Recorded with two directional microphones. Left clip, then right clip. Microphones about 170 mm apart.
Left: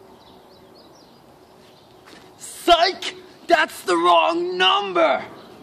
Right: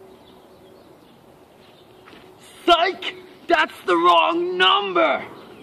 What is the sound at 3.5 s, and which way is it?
Speech, 20° left (ahead or behind).